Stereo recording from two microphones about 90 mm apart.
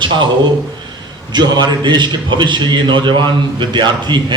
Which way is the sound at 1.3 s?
55° right (ahead or behind).